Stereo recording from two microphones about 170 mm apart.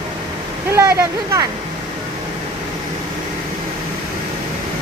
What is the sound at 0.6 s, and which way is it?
Speech, 15° right (ahead or behind).